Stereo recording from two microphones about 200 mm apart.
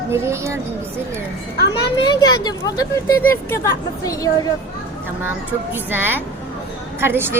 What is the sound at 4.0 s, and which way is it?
Speech, 15° left (ahead or behind).